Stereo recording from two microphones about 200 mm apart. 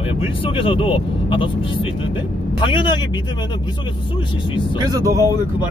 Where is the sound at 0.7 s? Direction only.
25° left (ahead or behind).